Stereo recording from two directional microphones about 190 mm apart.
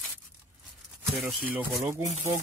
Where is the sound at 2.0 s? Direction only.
35° right (ahead or behind).